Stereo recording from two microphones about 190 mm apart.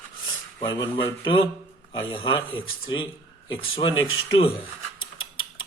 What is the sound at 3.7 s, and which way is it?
Speech, 25° left (ahead or behind).